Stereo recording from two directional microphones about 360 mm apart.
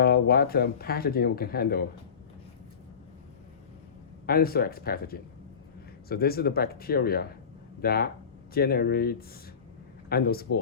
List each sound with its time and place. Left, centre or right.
0.0 s speech: left
4.3 s speech: left